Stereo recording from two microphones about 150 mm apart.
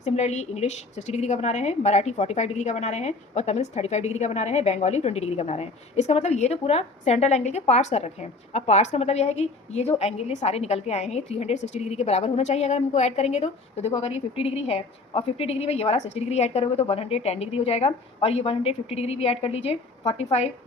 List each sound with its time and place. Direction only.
0.0 s a woman's voice: 50° left (ahead or behind)